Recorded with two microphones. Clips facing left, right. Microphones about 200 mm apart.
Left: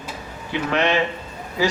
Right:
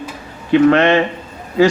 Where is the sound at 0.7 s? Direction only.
55° right (ahead or behind).